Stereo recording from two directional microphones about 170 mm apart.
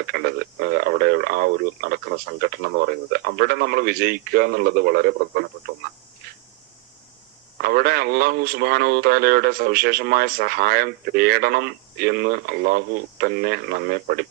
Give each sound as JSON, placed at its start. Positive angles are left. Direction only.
{"t": 0.0, "sound": "speech", "side_deg": -65}
{"t": 7.6, "sound": "speech", "side_deg": -65}